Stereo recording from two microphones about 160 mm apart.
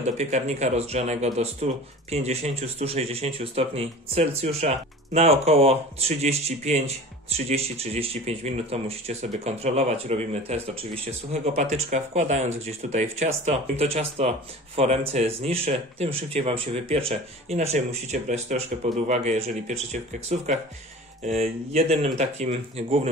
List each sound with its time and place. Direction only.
0.0 s speech: 45° right (ahead or behind)
21.7 s speech: 40° right (ahead or behind)